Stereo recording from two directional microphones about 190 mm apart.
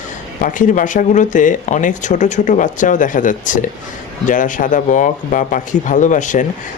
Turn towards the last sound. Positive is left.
turn(degrees=40)  # may be behind; listen again after turning